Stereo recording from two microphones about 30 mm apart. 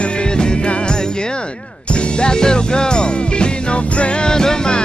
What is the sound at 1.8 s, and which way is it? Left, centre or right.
Music, left.